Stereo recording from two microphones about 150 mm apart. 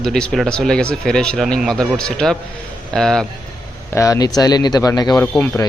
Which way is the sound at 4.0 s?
25° left (ahead or behind).